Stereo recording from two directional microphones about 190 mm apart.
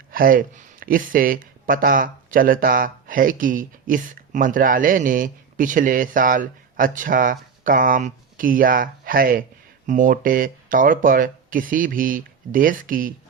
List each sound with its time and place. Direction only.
0.1 s speech: 50° right (ahead or behind)